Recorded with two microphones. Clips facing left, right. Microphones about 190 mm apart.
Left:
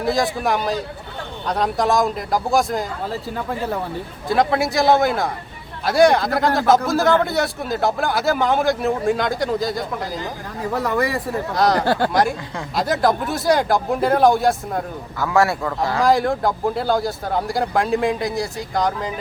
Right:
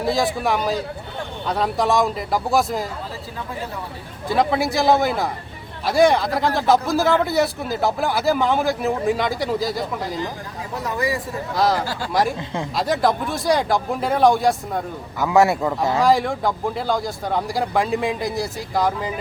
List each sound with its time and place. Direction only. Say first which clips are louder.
0.0 s a man's voice: left 1 dB; centre (ahead or behind)
4.3 s a man's voice: left 1 dB; centre (ahead or behind)
10.8 s speech: left 2 dB; 60° left (ahead or behind)
11.5 s a man's voice: left 1 dB; centre (ahead or behind)
11.9 s speech: left 9 dB; 60° left (ahead or behind)
12.7 s a man's voice: left 2 dB; centre (ahead or behind)
15.2 s speech: right 2 dB; 20° right (ahead or behind)
16.0 s a man's voice: left 3 dB; centre (ahead or behind)